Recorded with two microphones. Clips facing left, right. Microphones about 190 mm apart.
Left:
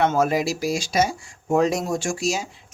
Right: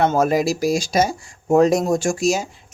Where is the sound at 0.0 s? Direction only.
40° right (ahead or behind).